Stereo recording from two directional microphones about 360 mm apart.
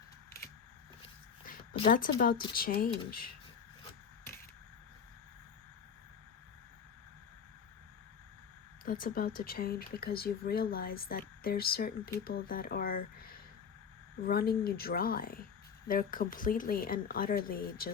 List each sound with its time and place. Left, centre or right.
1.5 s speech: centre
8.8 s speech: left